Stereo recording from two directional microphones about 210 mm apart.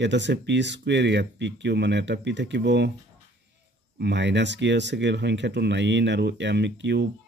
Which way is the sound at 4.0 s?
55° right (ahead or behind).